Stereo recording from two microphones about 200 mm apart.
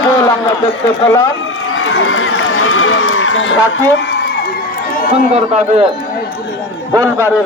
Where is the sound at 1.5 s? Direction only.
90° left.